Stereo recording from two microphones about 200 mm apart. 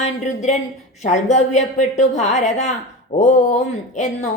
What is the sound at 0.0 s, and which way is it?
Speech, 35° left (ahead or behind).